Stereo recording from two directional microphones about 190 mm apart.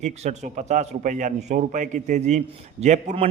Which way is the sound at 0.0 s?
40° right (ahead or behind).